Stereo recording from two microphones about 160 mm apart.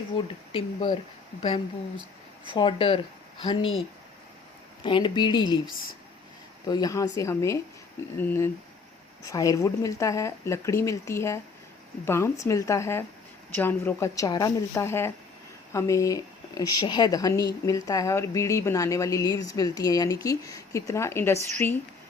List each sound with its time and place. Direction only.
0.5 s speech: 30° left (ahead or behind)
4.8 s speech: 30° left (ahead or behind)
6.7 s a woman's voice: 25° left (ahead or behind)